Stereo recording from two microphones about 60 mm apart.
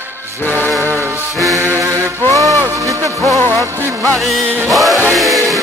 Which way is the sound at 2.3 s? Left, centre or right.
Right.